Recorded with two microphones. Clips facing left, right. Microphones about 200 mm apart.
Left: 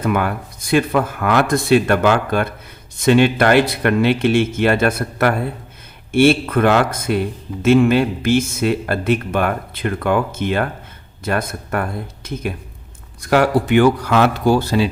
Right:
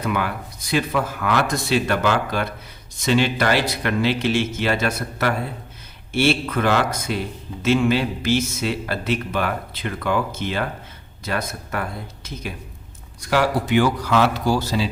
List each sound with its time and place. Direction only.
0.0 s a man's voice: 50° left (ahead or behind)